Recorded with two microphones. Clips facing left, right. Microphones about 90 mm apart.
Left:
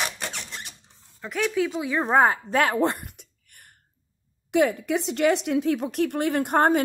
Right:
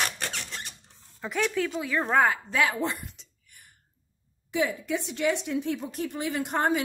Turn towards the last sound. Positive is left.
turn(degrees=50)  # may be behind; listen again after turning